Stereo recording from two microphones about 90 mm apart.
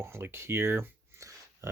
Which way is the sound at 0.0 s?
25° right (ahead or behind).